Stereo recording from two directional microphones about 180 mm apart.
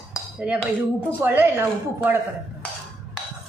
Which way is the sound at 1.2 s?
15° right (ahead or behind).